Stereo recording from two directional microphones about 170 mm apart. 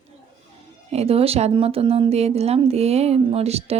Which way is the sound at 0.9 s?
35° right (ahead or behind).